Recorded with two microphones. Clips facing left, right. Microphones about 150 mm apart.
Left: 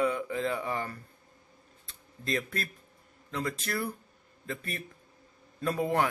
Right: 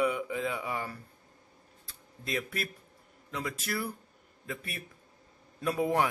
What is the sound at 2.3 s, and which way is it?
Speech, 5° right (ahead or behind).